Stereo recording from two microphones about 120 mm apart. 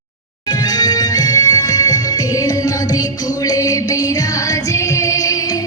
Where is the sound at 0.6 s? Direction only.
35° left (ahead or behind).